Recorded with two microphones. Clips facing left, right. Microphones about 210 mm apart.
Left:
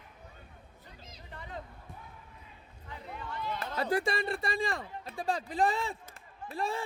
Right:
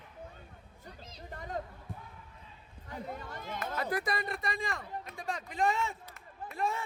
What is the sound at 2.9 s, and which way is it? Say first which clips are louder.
Run: right 1 dB; 45° right (ahead or behind).